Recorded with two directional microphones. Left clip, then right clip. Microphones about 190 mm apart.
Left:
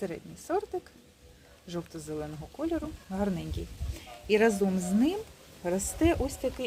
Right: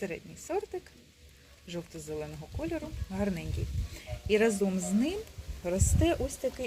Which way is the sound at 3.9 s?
15° left (ahead or behind).